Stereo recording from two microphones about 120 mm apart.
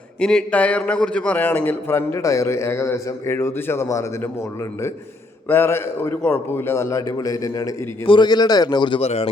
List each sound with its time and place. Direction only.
0.2 s a man's voice: 5° left (ahead or behind); by 4.3 s 25° left (ahead or behind)
5.5 s a man's voice: 20° left (ahead or behind)
8.0 s a man's voice: 40° left (ahead or behind)
9.0 s a man's voice: 55° left (ahead or behind)